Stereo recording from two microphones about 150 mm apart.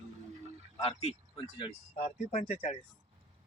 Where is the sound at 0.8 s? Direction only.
40° left (ahead or behind).